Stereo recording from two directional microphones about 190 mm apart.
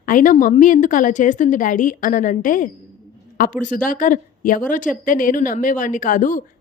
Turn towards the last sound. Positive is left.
turn(degrees=45)  # may be behind; listen again after turning